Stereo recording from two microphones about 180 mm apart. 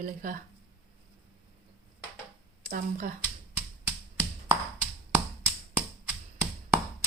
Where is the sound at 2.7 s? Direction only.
50° right (ahead or behind).